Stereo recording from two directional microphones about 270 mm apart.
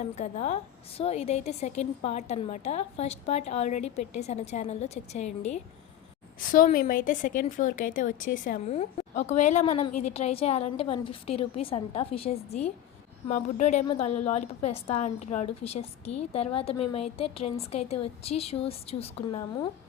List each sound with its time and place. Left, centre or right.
0.0 s a woman's voice: left
9.9 s a woman's voice: left
10.2 s a woman's voice: left